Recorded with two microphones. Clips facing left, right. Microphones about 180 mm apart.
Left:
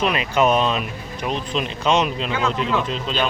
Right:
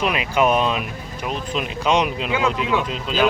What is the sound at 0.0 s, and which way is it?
Speech, 5° right (ahead or behind).